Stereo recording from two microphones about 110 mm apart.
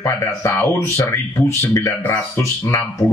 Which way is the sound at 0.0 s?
25° left (ahead or behind).